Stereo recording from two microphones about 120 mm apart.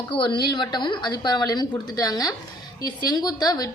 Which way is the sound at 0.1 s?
45° left (ahead or behind).